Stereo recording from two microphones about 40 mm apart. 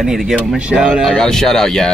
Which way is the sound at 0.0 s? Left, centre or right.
Centre.